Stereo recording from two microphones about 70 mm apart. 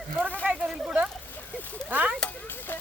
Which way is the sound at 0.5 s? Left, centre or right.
Centre.